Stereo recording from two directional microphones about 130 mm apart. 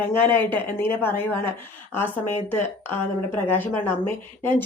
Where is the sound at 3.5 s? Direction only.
15° left (ahead or behind).